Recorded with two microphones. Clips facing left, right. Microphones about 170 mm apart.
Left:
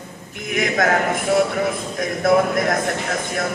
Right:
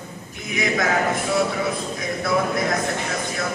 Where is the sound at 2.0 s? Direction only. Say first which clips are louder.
Left 6 dB; 50° left (ahead or behind).